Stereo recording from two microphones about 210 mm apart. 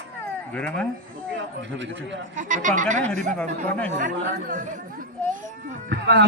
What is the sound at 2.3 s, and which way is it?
Speech, 40° right (ahead or behind).